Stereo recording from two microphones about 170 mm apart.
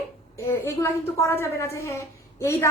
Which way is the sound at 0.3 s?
15° left (ahead or behind).